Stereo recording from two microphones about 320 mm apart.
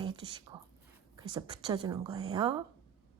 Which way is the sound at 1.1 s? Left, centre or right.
Centre.